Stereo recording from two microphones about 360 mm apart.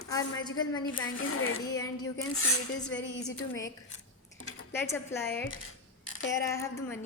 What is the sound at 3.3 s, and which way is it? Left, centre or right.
Speech, left.